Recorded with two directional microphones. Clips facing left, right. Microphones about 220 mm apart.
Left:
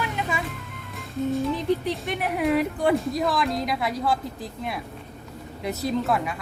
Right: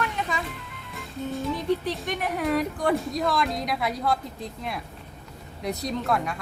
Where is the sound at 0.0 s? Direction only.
5° left (ahead or behind).